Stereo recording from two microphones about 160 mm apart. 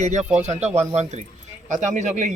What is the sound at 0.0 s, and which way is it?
Speech, 50° right (ahead or behind).